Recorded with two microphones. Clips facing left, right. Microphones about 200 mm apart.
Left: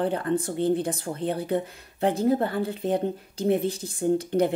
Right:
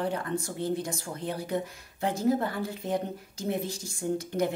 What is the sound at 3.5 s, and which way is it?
Speech, 55° left (ahead or behind).